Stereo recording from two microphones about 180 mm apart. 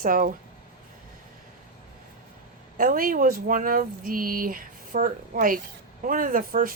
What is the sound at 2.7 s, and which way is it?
Speech, 50° right (ahead or behind).